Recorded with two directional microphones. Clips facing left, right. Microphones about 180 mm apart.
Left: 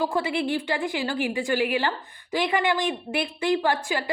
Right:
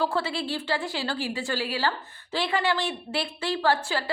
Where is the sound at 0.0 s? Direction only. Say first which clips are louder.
Left 2 dB; 15° left (ahead or behind).